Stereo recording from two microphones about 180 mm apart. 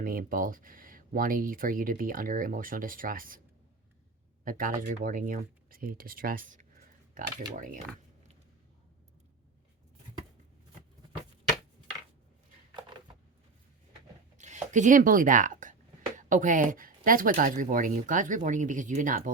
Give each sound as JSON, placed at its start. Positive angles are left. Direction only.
{"t": 0.0, "sound": "speech", "side_deg": -55}
{"t": 4.4, "sound": "speech", "side_deg": -50}
{"t": 14.3, "sound": "speech", "side_deg": -40}